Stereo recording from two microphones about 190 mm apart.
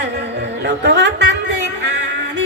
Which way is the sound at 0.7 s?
65° right (ahead or behind).